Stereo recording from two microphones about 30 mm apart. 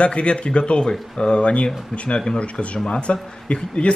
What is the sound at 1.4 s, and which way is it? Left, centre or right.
Speech, left.